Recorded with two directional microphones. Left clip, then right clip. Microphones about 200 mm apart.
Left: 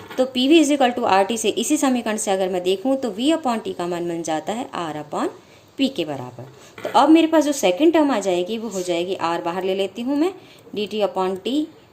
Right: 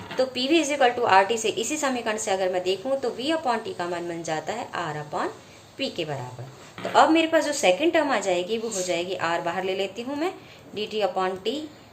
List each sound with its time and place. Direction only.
0.2 s a woman's voice: 50° left (ahead or behind)